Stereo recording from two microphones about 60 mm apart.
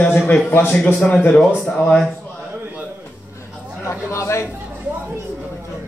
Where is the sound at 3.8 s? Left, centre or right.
Left.